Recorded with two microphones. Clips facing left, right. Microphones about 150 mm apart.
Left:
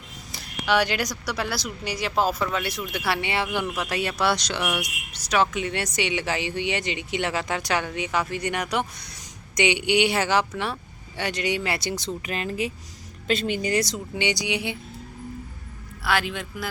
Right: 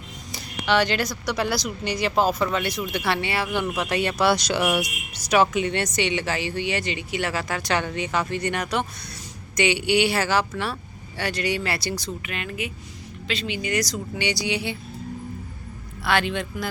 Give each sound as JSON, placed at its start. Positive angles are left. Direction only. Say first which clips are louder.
{"t": 0.3, "sound": "speech", "louder": "right 1 dB", "side_deg": 5}
{"t": 3.8, "sound": "speech", "louder": "right 3 dB", "side_deg": 0}
{"t": 5.6, "sound": "speech", "louder": "right 3 dB", "side_deg": 10}
{"t": 12.2, "sound": "speech", "louder": "left 3 dB", "side_deg": 35}
{"t": 13.2, "sound": "speech", "louder": "left 4 dB", "side_deg": 50}
{"t": 13.7, "sound": "speech", "louder": "left 1 dB", "side_deg": 25}
{"t": 16.0, "sound": "speech", "louder": "right 2 dB", "side_deg": 5}